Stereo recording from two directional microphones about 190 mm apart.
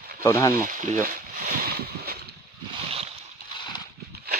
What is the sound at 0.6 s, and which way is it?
Speech, 45° right (ahead or behind).